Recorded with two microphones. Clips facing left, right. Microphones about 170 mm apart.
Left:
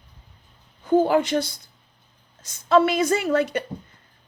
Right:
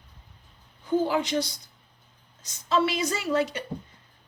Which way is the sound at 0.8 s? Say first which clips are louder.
Left 6 dB; 55° left (ahead or behind).